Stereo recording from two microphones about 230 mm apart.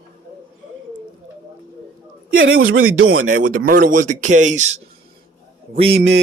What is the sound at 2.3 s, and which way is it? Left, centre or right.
A man's voice, right.